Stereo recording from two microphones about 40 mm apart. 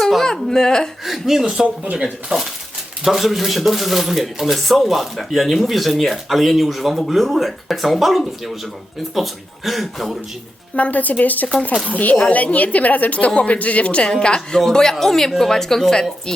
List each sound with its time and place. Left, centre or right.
0.2 s a sound: centre
1.0 s speech: centre
1.6 s speech: right
3.0 s speech: centre
10.8 s a woman's voice: left; by 16.3 s centre